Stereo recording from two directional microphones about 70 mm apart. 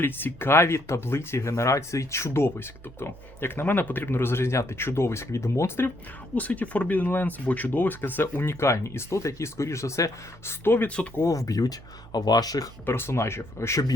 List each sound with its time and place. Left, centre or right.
0.0 s speech: left
6.3 s speech: left
10.8 s speech: centre
11.2 s speech: left
12.8 s speech: left